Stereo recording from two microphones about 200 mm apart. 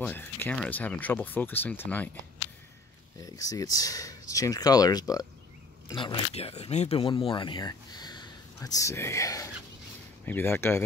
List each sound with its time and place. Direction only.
0.0 s speech: 10° left (ahead or behind)
3.2 s speech: 15° left (ahead or behind)